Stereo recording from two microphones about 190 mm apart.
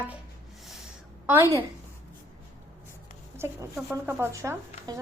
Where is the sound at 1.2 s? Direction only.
10° right (ahead or behind).